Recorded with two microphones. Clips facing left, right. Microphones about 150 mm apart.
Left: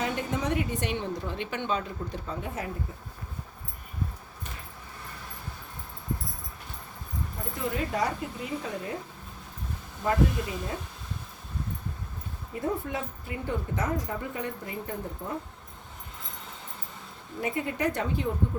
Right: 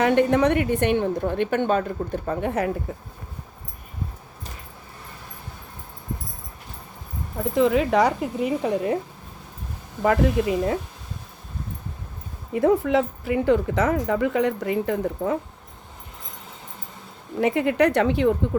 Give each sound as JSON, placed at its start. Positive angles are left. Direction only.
{"t": 0.0, "sound": "a woman's voice", "side_deg": -70}
{"t": 7.5, "sound": "speech", "side_deg": -90}
{"t": 10.0, "sound": "speech", "side_deg": -80}
{"t": 12.5, "sound": "speech", "side_deg": -90}
{"t": 17.4, "sound": "speech", "side_deg": -80}